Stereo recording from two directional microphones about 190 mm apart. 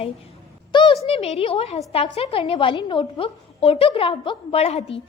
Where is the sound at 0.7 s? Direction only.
25° left (ahead or behind).